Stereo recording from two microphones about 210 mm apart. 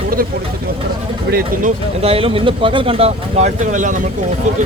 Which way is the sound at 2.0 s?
25° right (ahead or behind).